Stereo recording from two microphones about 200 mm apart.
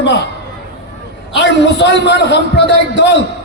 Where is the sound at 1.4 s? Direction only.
60° left (ahead or behind).